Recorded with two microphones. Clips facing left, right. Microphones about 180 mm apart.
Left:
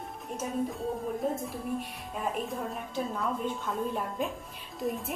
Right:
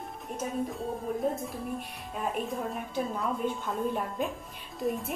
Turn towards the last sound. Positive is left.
turn(degrees=0)  # may be behind; listen again after turning